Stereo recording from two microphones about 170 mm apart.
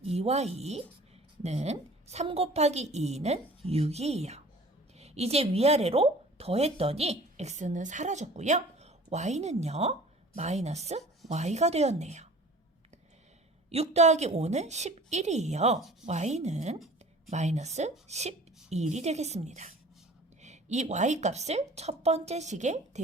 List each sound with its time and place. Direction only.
0.0 s a woman's voice: 40° right (ahead or behind)
13.7 s a woman's voice: 40° right (ahead or behind)
15.8 s speech: centre (ahead or behind)
16.0 s a woman's voice: 40° right (ahead or behind)